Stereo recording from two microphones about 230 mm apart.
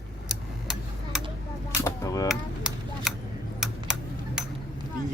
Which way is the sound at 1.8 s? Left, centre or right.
Centre.